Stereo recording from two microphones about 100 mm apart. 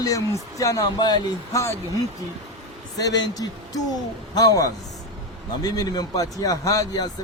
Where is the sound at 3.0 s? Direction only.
40° left (ahead or behind).